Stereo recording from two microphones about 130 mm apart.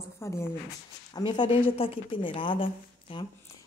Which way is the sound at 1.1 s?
35° left (ahead or behind).